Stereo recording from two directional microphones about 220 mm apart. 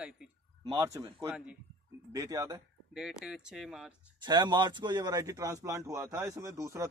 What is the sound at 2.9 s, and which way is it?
Speech, centre (ahead or behind).